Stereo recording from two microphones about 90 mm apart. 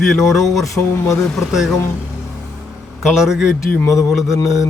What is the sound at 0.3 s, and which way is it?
Speech, centre (ahead or behind).